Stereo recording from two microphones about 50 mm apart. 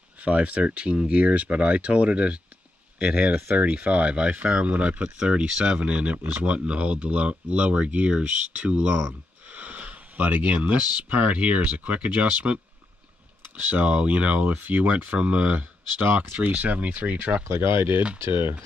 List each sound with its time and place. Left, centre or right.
0.2 s speech: right
13.7 s speech: right
16.0 s speech: right
16.3 s speech: right
17.5 s speech: right